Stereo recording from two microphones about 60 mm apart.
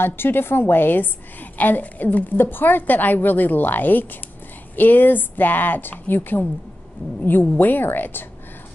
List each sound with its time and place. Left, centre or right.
0.0 s a woman's voice: left
7.5 s a woman's voice: left